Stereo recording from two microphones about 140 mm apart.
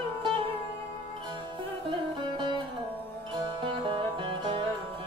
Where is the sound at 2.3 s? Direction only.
35° right (ahead or behind).